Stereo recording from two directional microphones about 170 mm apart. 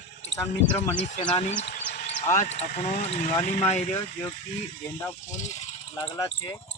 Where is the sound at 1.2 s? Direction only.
30° left (ahead or behind).